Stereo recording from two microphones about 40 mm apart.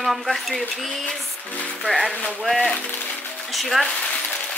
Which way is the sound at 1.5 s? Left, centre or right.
Left.